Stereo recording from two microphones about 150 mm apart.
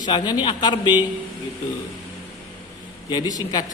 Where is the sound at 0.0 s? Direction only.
30° left (ahead or behind).